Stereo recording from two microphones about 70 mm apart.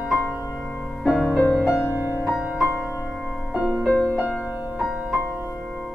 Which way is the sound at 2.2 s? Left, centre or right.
Centre.